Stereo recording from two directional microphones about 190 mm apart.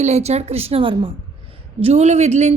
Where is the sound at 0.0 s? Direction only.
35° right (ahead or behind).